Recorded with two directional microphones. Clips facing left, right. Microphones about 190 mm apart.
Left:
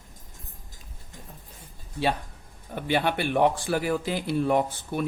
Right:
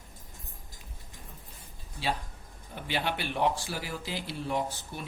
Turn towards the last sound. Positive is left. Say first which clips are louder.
# left 8 dB
turn(degrees=55)  # may be behind; listen again after turning